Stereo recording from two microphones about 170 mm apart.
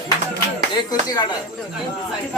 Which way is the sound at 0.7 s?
25° left (ahead or behind).